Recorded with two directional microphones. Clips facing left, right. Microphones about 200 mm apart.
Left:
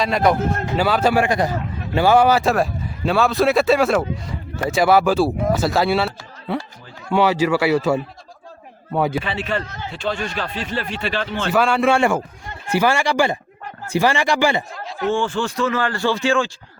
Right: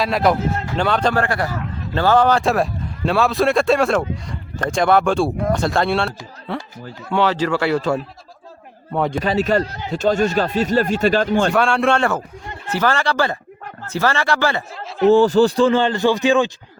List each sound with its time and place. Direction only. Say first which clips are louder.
0.0 s a man's voice: even; centre (ahead or behind)
9.2 s a man's voice: right 7 dB; 40° right (ahead or behind)
11.5 s a man's voice: even; centre (ahead or behind)
15.1 s speech: right 10 dB; 40° right (ahead or behind); by 16.5 s 20° right (ahead or behind)